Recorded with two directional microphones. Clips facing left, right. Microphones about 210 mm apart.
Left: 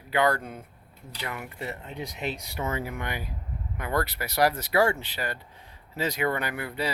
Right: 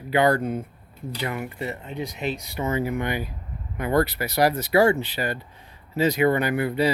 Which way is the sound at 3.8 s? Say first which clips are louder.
Right 7 dB; 20° right (ahead or behind).